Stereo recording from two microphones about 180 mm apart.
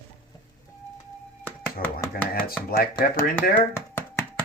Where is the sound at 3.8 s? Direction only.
15° left (ahead or behind).